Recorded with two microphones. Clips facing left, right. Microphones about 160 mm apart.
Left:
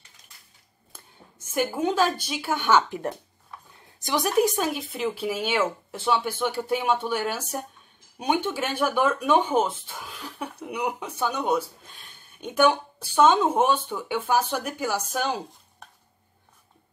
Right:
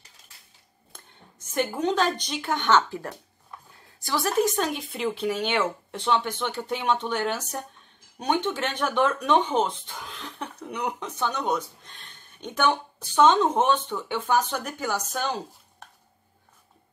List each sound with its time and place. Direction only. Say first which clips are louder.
0.9 s speech: left 1 dB; 5° left (ahead or behind)
4.0 s speech: left 2 dB; 15° left (ahead or behind)